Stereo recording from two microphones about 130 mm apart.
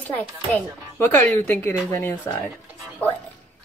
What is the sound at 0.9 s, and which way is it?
Speech, 20° left (ahead or behind).